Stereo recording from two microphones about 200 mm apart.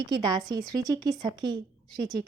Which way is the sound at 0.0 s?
20° right (ahead or behind).